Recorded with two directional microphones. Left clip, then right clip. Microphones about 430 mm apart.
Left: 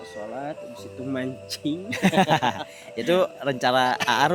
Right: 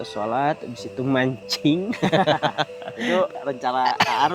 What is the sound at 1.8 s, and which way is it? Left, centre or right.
Speech, left.